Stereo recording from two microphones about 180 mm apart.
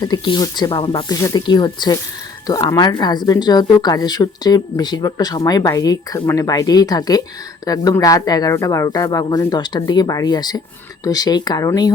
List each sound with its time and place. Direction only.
0.0 s speech: 25° left (ahead or behind)